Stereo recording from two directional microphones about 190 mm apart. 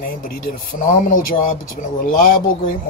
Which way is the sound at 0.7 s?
45° left (ahead or behind).